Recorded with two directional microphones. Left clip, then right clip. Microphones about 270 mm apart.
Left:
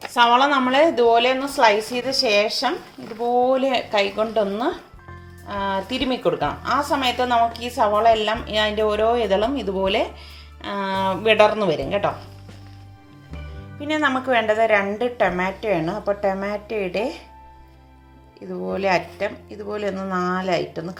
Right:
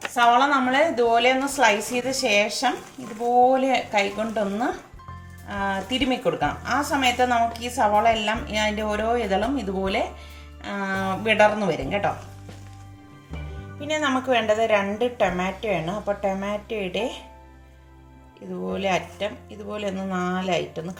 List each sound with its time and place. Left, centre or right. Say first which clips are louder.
0.1 s a woman's voice: left 2 dB; left
5.5 s a woman's voice: left 2 dB; left
13.7 s a woman's voice: left 3 dB; centre
18.6 s a woman's voice: left 4 dB; centre